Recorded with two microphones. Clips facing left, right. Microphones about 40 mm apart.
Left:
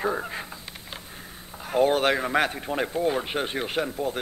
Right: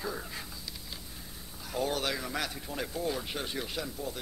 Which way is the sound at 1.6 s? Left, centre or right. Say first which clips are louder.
Left 11 dB; left.